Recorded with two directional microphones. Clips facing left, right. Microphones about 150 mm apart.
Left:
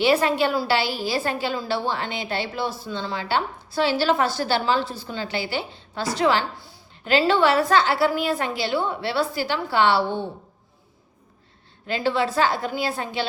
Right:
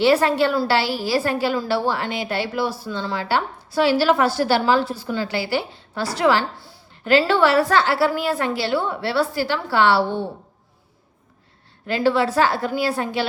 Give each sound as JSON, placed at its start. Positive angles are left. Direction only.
{"t": 0.0, "sound": "a woman's voice", "side_deg": 20}
{"t": 11.9, "sound": "a woman's voice", "side_deg": 20}